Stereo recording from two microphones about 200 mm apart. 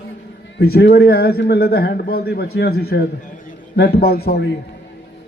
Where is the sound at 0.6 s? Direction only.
55° left (ahead or behind).